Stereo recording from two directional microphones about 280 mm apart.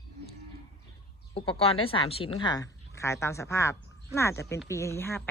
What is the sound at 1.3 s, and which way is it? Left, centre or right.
Speech, centre.